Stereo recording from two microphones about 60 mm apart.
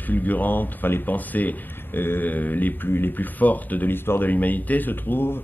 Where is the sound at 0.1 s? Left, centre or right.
Left.